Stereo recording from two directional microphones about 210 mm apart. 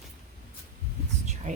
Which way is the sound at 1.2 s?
35° right (ahead or behind).